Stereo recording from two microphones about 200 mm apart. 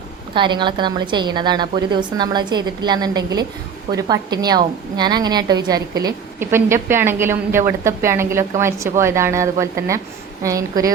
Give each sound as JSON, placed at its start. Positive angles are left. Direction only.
{"t": 0.3, "sound": "a woman's voice", "side_deg": -25}